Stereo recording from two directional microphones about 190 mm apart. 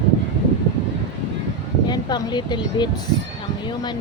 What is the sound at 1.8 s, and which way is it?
Speech, 20° left (ahead or behind).